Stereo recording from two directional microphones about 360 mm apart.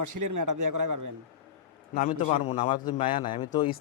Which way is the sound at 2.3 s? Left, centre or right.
Centre.